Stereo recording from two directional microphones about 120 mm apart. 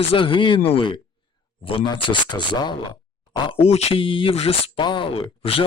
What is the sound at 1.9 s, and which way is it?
Speech, 35° left (ahead or behind).